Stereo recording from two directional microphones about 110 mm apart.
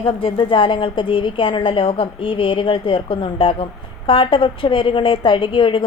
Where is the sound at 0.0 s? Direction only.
55° left (ahead or behind).